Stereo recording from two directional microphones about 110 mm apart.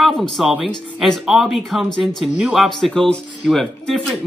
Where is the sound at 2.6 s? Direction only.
5° left (ahead or behind).